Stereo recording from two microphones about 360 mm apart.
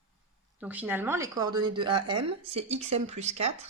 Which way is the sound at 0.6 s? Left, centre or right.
Centre.